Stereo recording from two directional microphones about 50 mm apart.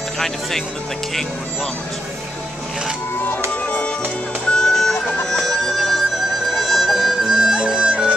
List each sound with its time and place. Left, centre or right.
3.6 s music: left
4.5 s vehicle: centre
5.2 s music: centre